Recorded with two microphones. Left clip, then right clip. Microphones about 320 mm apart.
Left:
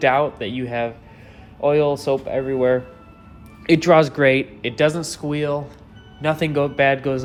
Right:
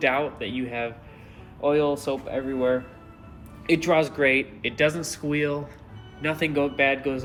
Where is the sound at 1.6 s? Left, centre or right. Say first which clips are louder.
Left 5 dB; left.